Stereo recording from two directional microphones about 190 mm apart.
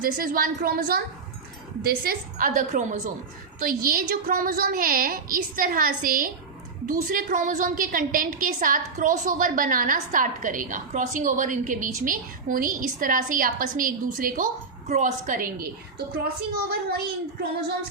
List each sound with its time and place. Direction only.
0.0 s a woman's voice: 50° right (ahead or behind)
16.1 s a woman's voice: 55° right (ahead or behind)